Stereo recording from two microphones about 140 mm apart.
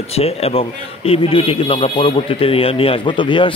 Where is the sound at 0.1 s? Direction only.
45° left (ahead or behind).